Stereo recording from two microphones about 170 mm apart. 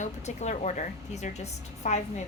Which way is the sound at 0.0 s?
45° left (ahead or behind).